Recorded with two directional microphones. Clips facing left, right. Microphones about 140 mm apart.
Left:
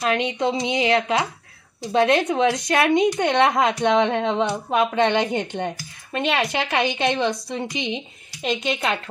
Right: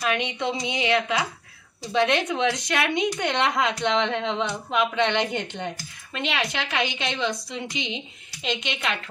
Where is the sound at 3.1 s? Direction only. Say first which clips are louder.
Left 5 dB; 55° left (ahead or behind).